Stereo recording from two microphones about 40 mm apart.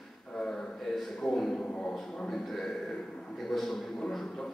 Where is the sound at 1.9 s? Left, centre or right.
Centre.